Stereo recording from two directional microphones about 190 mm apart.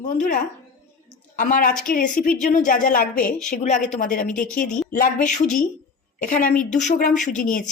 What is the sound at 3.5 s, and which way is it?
A woman's voice, 40° left (ahead or behind).